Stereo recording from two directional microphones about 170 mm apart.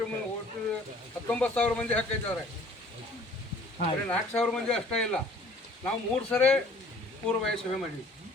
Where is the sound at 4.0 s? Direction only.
10° left (ahead or behind).